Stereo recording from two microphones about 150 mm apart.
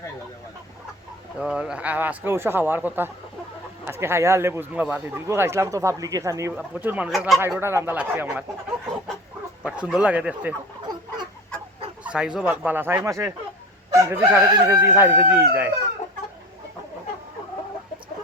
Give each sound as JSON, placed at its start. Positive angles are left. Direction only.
{"t": 1.4, "sound": "speech", "side_deg": -5}
{"t": 6.5, "sound": "speech", "side_deg": -10}
{"t": 7.6, "sound": "speech", "side_deg": -15}
{"t": 9.6, "sound": "speech", "side_deg": -5}
{"t": 12.0, "sound": "speech", "side_deg": -5}